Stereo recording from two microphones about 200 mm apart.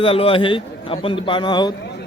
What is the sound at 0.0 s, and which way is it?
A man's voice, 25° left (ahead or behind).